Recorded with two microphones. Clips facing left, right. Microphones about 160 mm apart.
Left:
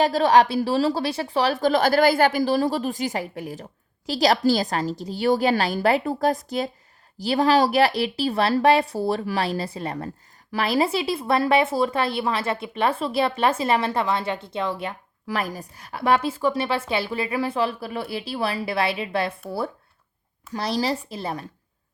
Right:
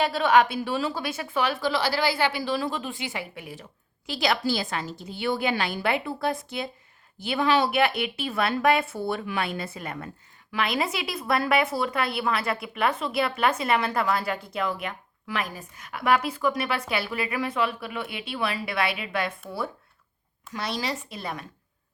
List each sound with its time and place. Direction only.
0.0 s a woman's voice: 40° left (ahead or behind)
20.5 s a woman's voice: 35° left (ahead or behind)